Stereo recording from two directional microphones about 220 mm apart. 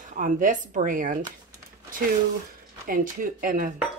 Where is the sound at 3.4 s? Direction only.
40° right (ahead or behind).